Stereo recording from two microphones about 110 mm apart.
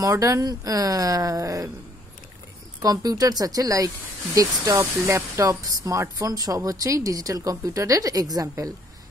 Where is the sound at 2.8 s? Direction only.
35° right (ahead or behind).